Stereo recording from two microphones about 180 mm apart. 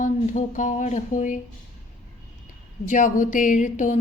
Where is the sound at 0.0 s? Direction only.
45° left (ahead or behind).